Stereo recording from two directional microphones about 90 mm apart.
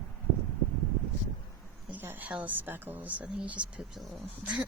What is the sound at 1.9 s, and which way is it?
A woman's voice, 20° right (ahead or behind).